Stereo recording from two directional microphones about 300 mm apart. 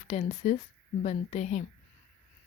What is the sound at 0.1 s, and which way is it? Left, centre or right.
Speech, left.